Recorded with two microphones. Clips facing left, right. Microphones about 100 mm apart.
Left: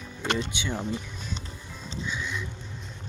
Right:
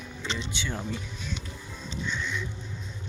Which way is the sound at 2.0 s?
5° left (ahead or behind).